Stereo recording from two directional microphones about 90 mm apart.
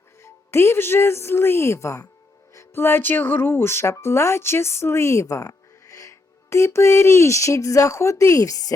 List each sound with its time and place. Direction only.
0.2 s speech: 30° left (ahead or behind)